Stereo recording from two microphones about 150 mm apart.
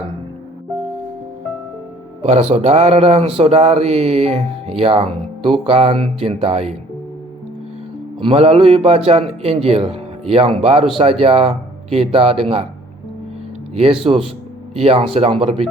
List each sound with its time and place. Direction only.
2.2 s speech: 50° right (ahead or behind)
8.2 s speech: 40° right (ahead or behind)
13.7 s speech: 40° right (ahead or behind)